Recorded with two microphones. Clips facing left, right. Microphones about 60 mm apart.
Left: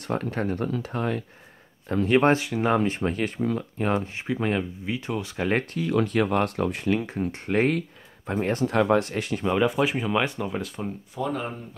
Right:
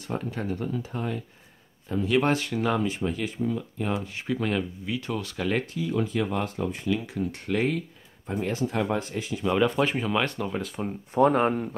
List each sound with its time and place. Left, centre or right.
0.0 s speech: left
2.0 s speech: left
2.3 s speech: centre
2.8 s speech: left
4.1 s speech: left
5.8 s speech: left
7.1 s speech: left
8.4 s speech: left
8.6 s speech: left
9.5 s speech: centre
11.1 s speech: right